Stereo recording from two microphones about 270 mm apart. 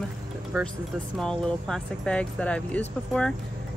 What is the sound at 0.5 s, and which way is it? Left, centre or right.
Speech, centre.